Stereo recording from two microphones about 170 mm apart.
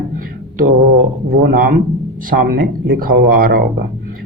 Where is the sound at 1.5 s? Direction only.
55° right (ahead or behind).